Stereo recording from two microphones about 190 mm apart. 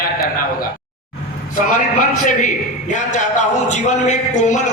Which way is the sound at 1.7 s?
40° left (ahead or behind).